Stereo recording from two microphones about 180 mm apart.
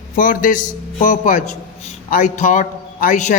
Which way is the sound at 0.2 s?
50° left (ahead or behind).